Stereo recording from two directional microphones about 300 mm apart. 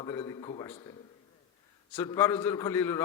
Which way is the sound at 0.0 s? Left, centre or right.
Centre.